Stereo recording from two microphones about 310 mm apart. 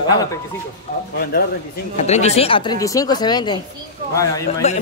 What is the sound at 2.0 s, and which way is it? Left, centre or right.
Speech, left.